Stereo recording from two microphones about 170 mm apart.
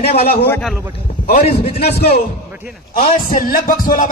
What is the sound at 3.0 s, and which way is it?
Speech, 55° left (ahead or behind).